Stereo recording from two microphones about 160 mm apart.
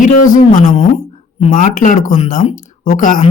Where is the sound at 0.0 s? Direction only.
55° left (ahead or behind).